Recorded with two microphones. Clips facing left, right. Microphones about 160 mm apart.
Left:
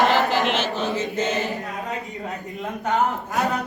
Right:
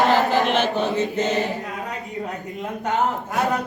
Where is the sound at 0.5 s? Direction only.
60° right (ahead or behind).